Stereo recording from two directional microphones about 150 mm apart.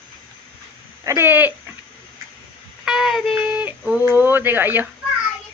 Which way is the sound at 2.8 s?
5° right (ahead or behind).